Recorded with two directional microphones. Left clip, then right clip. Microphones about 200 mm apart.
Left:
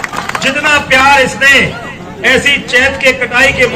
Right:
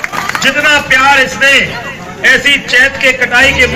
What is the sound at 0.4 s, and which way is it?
A man's voice, 55° left (ahead or behind).